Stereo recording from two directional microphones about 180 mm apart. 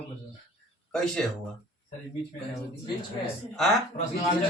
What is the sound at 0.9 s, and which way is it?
Speech, 5° left (ahead or behind).